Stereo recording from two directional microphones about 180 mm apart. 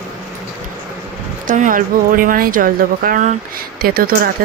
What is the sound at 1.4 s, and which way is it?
Speech, 45° right (ahead or behind).